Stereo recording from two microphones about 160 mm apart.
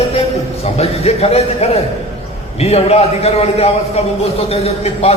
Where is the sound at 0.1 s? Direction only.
40° left (ahead or behind).